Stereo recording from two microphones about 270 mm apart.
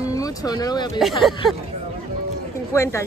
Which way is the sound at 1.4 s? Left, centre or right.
Centre.